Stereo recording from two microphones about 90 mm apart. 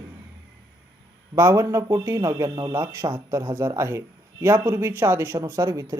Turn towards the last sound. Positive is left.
turn(degrees=-40)  # may be behind; listen again after turning